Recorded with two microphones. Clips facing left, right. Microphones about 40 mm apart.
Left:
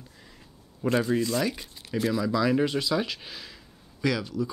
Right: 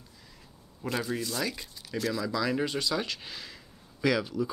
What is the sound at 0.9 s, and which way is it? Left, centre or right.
Speech, left.